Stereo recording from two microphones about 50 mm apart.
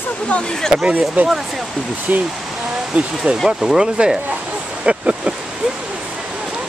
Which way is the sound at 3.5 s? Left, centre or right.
Centre.